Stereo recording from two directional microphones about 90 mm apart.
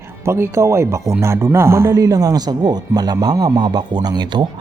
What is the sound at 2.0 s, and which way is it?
A man's voice, 40° right (ahead or behind).